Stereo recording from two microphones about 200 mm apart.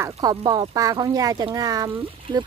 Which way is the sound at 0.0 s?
20° right (ahead or behind).